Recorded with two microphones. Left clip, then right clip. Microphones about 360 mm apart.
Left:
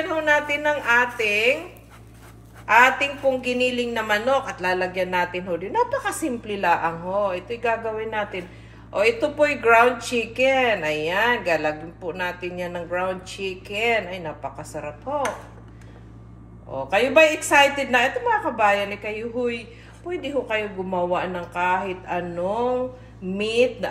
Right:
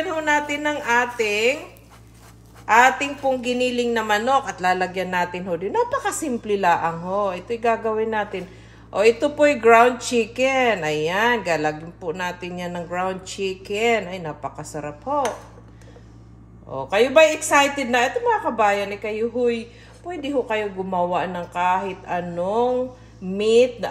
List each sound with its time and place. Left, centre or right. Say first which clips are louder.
0.0 s speech: even; right
2.6 s a man's voice: right 1 dB; right
16.7 s a man's voice: right 2 dB; right